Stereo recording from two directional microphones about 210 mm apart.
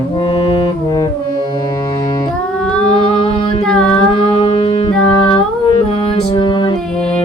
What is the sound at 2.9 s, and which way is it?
Music, 25° left (ahead or behind).